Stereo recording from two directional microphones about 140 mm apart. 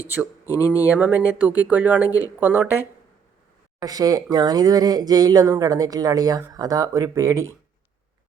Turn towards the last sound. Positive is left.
turn(degrees=-20)  # may be behind; listen again after turning